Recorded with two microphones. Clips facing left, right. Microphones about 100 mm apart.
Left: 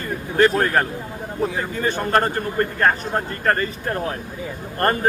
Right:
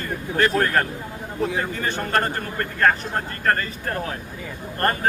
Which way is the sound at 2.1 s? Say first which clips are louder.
Left 4 dB; 20° left (ahead or behind).